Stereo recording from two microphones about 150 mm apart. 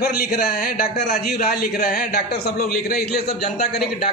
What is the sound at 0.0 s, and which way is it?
A man's voice, 90° left.